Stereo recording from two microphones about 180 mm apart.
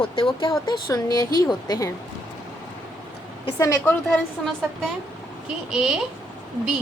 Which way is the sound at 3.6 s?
15° left (ahead or behind).